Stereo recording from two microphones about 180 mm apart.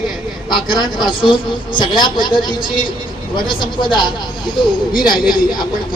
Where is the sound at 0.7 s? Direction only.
25° left (ahead or behind).